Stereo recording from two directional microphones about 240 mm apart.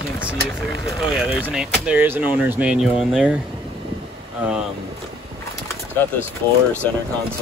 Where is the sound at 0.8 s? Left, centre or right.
Centre.